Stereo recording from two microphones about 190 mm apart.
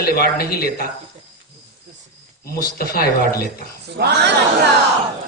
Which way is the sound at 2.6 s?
50° left (ahead or behind).